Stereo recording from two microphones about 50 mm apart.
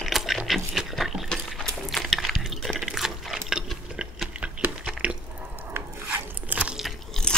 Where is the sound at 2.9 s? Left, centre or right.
Centre.